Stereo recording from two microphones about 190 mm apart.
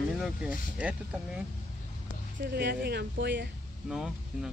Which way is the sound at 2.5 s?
60° right (ahead or behind).